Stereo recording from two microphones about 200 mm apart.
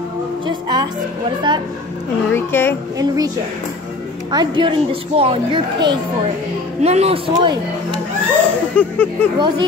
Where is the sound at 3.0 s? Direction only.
20° right (ahead or behind).